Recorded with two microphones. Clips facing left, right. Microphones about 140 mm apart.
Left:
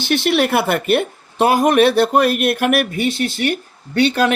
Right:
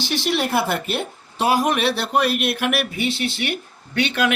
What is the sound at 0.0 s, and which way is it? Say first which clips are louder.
Speech: left 6 dB; 55° left (ahead or behind).